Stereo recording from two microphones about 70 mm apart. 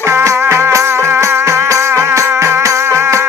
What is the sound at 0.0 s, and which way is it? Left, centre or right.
Music, right.